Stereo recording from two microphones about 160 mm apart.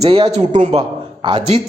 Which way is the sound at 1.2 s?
30° right (ahead or behind).